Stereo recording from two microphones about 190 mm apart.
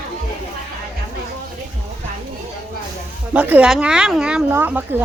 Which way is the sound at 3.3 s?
10° right (ahead or behind).